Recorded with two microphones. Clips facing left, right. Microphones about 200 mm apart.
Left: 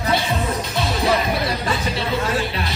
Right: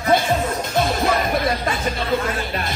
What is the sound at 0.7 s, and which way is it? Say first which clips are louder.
Music: right 1 dB; 50° right (ahead or behind).